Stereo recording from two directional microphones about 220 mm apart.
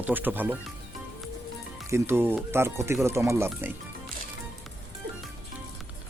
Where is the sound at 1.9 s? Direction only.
10° right (ahead or behind).